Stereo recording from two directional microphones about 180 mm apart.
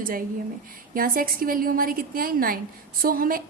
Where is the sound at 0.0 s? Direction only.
55° right (ahead or behind).